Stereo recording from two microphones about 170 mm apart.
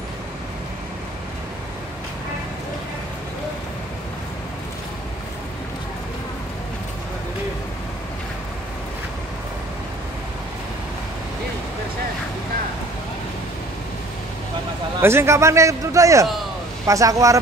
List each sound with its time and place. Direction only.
15.0 s a man's voice: 15° right (ahead or behind)